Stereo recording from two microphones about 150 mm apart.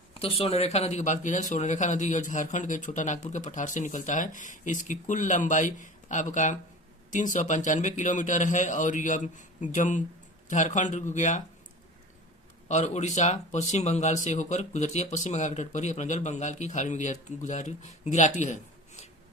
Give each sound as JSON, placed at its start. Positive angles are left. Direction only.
{"t": 0.1, "sound": "a man's voice", "side_deg": 40}
{"t": 12.6, "sound": "speech", "side_deg": 50}